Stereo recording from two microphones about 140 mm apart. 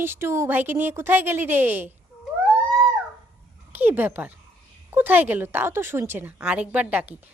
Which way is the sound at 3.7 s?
15° right (ahead or behind).